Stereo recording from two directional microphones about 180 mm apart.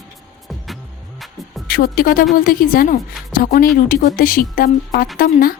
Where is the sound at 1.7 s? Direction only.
55° left (ahead or behind).